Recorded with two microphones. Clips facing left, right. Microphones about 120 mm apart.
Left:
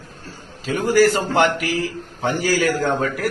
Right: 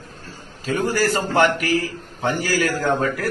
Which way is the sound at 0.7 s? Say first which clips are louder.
Left 4 dB; 15° left (ahead or behind).